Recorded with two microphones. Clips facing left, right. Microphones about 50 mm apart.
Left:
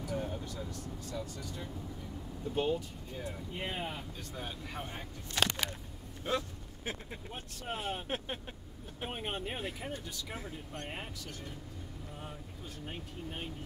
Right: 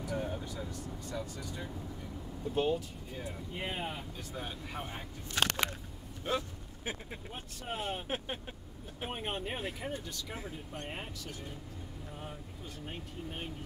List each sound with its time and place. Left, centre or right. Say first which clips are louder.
0.0 s vehicle: right 1 dB; centre
0.8 s speech: right 1 dB; centre
12.8 s speech: even; centre